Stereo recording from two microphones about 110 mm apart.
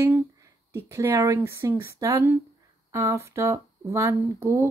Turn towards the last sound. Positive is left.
turn(degrees=-25)  # may be behind; listen again after turning